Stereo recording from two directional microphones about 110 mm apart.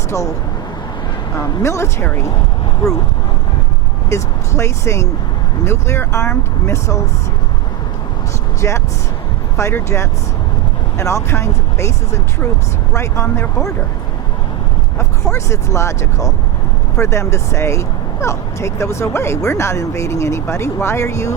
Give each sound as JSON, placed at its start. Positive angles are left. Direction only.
{"t": 1.6, "sound": "speech", "side_deg": 25}
{"t": 4.1, "sound": "speech", "side_deg": 25}
{"t": 8.6, "sound": "speech", "side_deg": 25}
{"t": 14.9, "sound": "speech", "side_deg": 25}